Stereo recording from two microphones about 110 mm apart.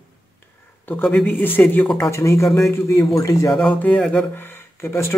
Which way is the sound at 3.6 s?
15° left (ahead or behind).